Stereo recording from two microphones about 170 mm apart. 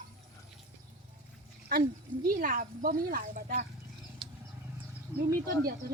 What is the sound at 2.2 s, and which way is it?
Speech, 55° right (ahead or behind).